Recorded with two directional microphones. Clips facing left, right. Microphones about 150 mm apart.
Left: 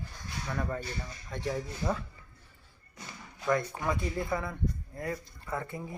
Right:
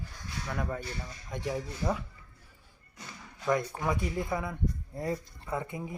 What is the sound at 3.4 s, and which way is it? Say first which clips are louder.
Speech: even; 10° right (ahead or behind).